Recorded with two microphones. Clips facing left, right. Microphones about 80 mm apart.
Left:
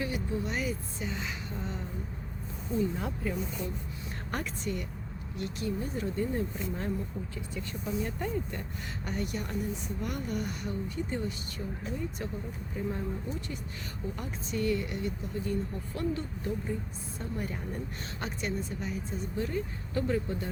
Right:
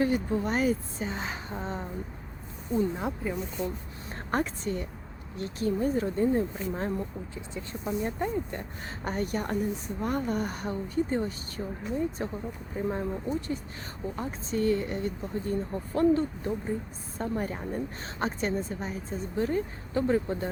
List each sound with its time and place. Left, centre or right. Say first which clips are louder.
0.0 s speech: right 7 dB; right
2.9 s speech: right 2 dB; right
7.9 s speech: right 4 dB; right
9.0 s a woman's voice: right 6 dB; right
14.2 s speech: right 5 dB; right
17.2 s speech: right 6 dB; right